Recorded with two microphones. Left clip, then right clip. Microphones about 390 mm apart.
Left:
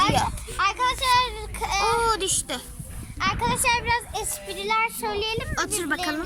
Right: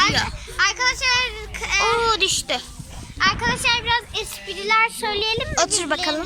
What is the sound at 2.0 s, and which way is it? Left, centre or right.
A child's voice, centre.